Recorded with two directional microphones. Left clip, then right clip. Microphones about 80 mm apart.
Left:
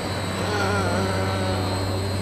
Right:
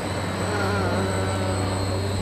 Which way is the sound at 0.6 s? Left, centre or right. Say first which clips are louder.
Left 2 dB; left.